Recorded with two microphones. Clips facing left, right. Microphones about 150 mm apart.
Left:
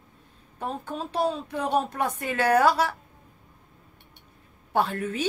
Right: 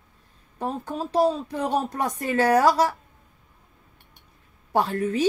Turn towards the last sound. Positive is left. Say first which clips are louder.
# right 3 dB
turn(degrees=-40)  # may be behind; listen again after turning